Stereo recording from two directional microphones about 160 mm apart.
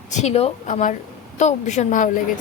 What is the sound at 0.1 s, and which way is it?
A woman's voice, 45° left (ahead or behind).